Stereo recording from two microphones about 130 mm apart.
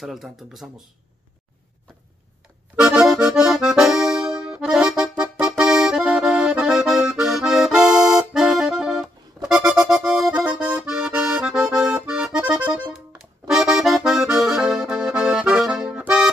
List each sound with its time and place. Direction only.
0.0 s speech: centre (ahead or behind)
2.7 s accordion: 5° right (ahead or behind)